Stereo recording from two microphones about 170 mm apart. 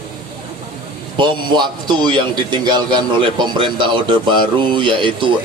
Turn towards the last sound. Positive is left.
turn(degrees=-30)  # may be behind; listen again after turning